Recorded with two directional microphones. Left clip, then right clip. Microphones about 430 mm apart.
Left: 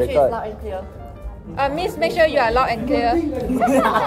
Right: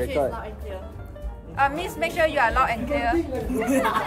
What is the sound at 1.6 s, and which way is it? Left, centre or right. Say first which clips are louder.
A woman's voice: left 3 dB; centre.